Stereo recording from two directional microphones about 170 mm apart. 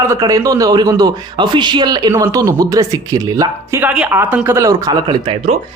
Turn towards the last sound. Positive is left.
turn(degrees=-30)  # may be behind; listen again after turning